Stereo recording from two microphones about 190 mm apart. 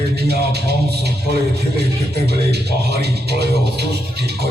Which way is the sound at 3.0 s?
60° right (ahead or behind).